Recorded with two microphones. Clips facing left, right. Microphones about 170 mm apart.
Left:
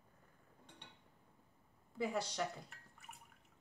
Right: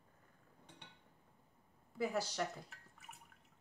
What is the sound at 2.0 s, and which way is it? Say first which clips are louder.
Speech: right 1 dB; centre (ahead or behind).